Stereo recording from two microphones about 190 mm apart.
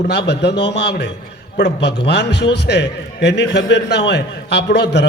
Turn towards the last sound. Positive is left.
turn(degrees=65)  # may be behind; listen again after turning